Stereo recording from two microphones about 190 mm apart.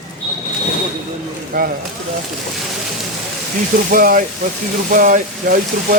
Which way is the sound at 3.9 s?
45° right (ahead or behind).